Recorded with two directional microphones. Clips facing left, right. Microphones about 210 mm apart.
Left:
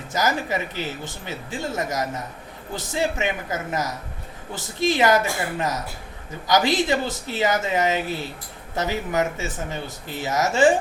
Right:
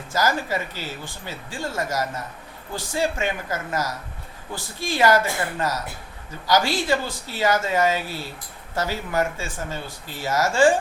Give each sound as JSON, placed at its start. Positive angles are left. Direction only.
{"t": 0.1, "sound": "speech", "side_deg": 20}